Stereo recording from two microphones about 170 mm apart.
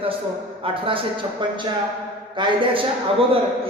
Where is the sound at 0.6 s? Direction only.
30° right (ahead or behind).